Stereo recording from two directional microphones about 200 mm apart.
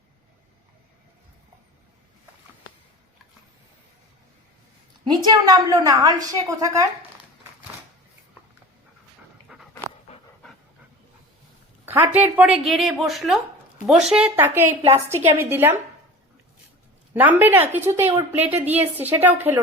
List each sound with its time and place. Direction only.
5.0 s a woman's voice: 20° right (ahead or behind)
9.5 s dog: 5° right (ahead or behind)
11.9 s a woman's voice: 10° right (ahead or behind)
17.2 s a woman's voice: 10° right (ahead or behind)